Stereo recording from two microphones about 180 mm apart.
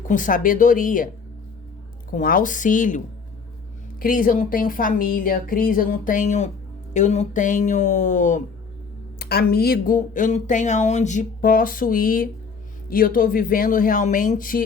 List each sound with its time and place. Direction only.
0.0 s speech: 45° left (ahead or behind)
4.0 s speech: 50° left (ahead or behind)
9.1 s speech: 60° left (ahead or behind)